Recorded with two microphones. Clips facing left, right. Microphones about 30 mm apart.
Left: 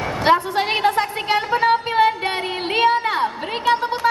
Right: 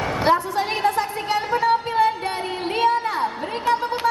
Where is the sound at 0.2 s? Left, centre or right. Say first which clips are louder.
Left 3 dB; left.